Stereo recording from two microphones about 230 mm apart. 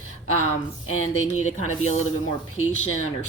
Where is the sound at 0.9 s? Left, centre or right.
Left.